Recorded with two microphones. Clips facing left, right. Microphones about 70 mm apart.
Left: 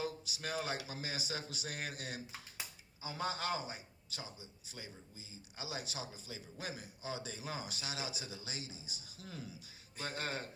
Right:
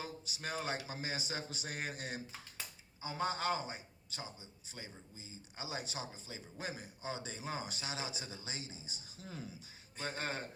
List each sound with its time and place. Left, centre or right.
0.0 s a man's voice: right
2.2 s speech: centre
3.0 s a man's voice: right